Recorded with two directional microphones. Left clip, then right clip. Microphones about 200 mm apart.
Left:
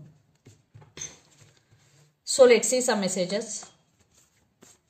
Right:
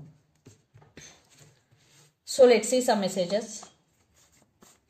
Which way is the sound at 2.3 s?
35° left (ahead or behind).